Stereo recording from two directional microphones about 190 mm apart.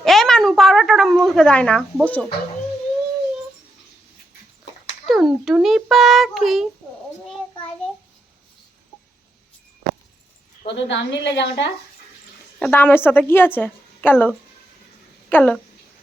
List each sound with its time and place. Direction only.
0.0 s a sound: centre (ahead or behind)
5.0 s a child's voice: centre (ahead or behind)
10.8 s a woman's voice: 70° left (ahead or behind)
12.5 s a woman's voice: 5° left (ahead or behind)